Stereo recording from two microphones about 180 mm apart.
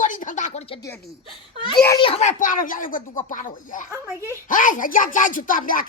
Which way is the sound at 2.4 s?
50° left (ahead or behind).